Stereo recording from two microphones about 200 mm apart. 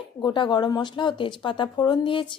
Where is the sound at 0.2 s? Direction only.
25° left (ahead or behind).